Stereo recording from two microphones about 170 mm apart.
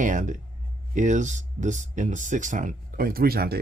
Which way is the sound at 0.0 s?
50° right (ahead or behind).